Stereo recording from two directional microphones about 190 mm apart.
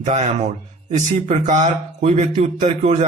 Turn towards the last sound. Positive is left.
turn(degrees=-35)  # may be behind; listen again after turning